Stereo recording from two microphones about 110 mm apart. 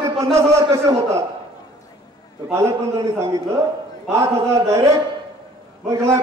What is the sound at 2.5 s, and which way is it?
Speech, 25° right (ahead or behind).